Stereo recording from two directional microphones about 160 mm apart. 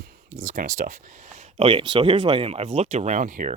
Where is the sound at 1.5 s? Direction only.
35° right (ahead or behind).